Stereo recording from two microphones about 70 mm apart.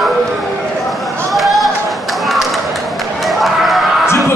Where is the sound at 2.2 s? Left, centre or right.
Centre.